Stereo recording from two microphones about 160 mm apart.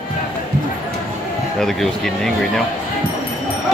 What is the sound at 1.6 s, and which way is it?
Speech, centre (ahead or behind).